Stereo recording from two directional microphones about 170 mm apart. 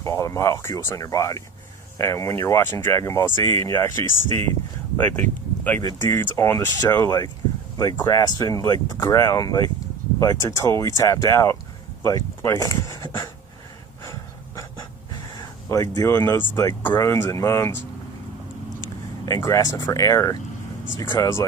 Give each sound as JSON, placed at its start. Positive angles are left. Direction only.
{"t": 0.0, "sound": "speech", "side_deg": 15}
{"t": 14.0, "sound": "breathing", "side_deg": 15}
{"t": 15.1, "sound": "speech", "side_deg": 20}
{"t": 18.8, "sound": "vehicle", "side_deg": 20}
{"t": 19.7, "sound": "speech", "side_deg": 20}